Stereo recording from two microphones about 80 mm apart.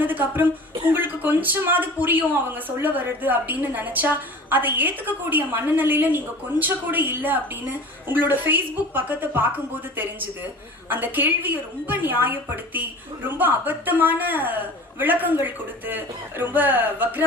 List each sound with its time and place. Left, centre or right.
0.0 s a woman's voice: right
10.8 s a woman's voice: right